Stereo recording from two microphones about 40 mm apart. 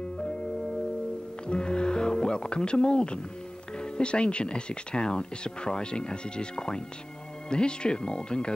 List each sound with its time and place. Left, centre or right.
1.5 s speech: left